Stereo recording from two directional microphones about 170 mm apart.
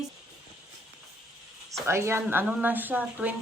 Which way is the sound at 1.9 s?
15° right (ahead or behind).